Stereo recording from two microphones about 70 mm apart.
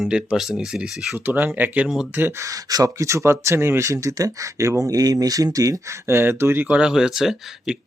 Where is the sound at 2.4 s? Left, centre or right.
Right.